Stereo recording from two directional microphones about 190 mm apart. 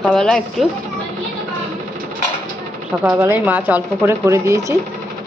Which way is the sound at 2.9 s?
10° right (ahead or behind).